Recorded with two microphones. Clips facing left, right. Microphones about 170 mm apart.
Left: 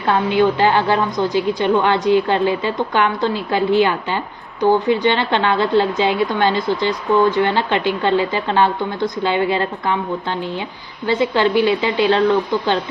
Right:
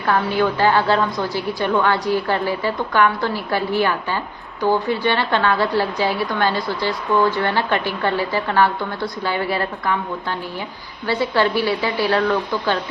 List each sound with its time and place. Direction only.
0.0 s a woman's voice: 20° left (ahead or behind)